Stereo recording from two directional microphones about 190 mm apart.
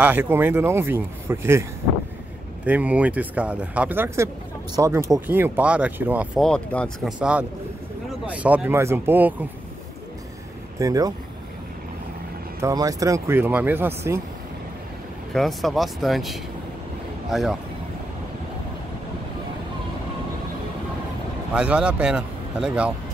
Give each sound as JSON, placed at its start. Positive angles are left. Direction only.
{"t": 0.0, "sound": "speech", "side_deg": -10}
{"t": 6.4, "sound": "a man's voice", "side_deg": 5}
{"t": 7.2, "sound": "a man's voice", "side_deg": -5}
{"t": 10.8, "sound": "speech", "side_deg": -20}
{"t": 12.5, "sound": "speech", "side_deg": -15}
{"t": 15.3, "sound": "a man's voice", "side_deg": 0}
{"t": 21.5, "sound": "a man's voice", "side_deg": -5}